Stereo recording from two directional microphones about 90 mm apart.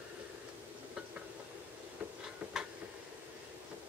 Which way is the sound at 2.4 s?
15° right (ahead or behind).